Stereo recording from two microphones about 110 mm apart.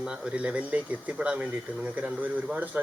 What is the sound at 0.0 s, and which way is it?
Speech, 10° right (ahead or behind).